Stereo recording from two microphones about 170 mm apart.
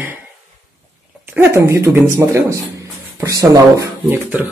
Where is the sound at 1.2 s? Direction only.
15° right (ahead or behind).